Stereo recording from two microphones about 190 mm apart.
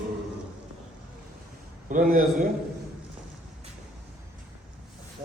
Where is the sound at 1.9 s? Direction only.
45° right (ahead or behind).